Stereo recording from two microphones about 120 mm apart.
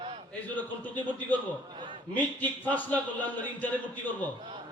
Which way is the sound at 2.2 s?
15° left (ahead or behind).